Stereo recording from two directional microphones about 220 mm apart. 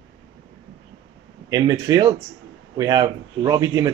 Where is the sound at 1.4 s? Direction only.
15° right (ahead or behind).